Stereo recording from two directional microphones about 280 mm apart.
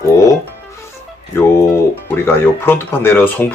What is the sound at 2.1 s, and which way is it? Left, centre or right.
Speech, centre.